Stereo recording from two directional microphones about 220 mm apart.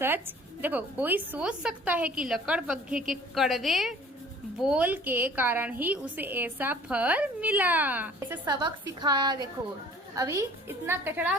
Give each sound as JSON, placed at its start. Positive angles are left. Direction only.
{"t": 0.0, "sound": "a woman's voice", "side_deg": -10}
{"t": 8.4, "sound": "a woman's voice", "side_deg": -20}